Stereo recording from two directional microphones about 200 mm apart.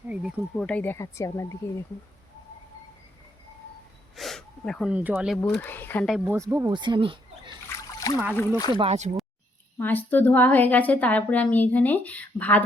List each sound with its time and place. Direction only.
0.1 s a woman's voice: 5° right (ahead or behind); by 1.5 s 15° left (ahead or behind)
4.1 s speech: centre (ahead or behind)
5.5 s a woman's voice: 10° left (ahead or behind)
6.1 s speech: centre (ahead or behind)
6.3 s speech: 15° right (ahead or behind)
8.1 s a woman's voice: 15° left (ahead or behind)
8.8 s speech: 35° right (ahead or behind)
9.7 s a woman's voice: 10° left (ahead or behind)